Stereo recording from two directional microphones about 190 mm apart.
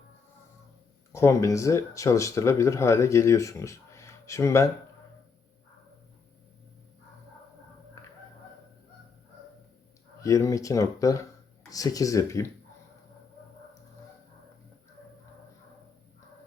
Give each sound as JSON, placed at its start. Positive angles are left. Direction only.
{"t": 1.1, "sound": "speech", "side_deg": 15}
{"t": 10.2, "sound": "speech", "side_deg": 15}